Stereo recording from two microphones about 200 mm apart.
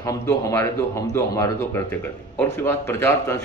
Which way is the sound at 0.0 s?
15° left (ahead or behind).